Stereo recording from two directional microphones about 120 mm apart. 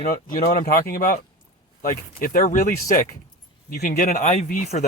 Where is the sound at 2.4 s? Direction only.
90° left.